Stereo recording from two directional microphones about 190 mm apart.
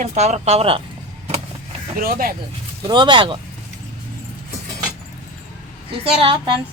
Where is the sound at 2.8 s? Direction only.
25° right (ahead or behind).